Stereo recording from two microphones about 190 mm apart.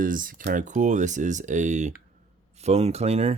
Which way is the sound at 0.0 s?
45° right (ahead or behind).